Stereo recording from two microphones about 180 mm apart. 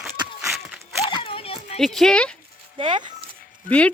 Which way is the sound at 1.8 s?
Centre (ahead or behind).